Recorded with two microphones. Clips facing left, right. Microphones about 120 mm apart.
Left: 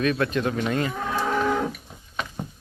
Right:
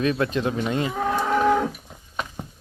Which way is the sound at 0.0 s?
25° right (ahead or behind).